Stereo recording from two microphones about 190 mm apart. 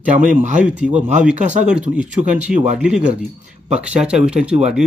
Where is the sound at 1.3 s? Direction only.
40° right (ahead or behind).